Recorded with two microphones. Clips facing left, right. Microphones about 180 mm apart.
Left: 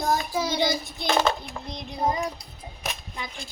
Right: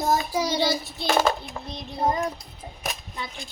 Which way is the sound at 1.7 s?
15° left (ahead or behind).